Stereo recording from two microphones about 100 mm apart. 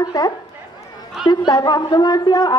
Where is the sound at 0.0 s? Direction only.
40° left (ahead or behind).